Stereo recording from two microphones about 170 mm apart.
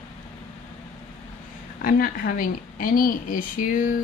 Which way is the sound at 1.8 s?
55° left (ahead or behind).